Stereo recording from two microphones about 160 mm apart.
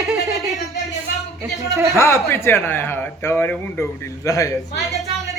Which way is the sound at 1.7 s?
20° right (ahead or behind).